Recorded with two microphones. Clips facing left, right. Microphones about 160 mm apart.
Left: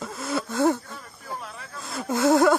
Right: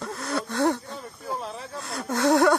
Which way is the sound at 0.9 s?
25° right (ahead or behind).